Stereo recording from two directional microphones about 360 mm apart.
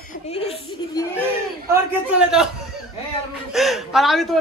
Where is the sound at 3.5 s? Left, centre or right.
Centre.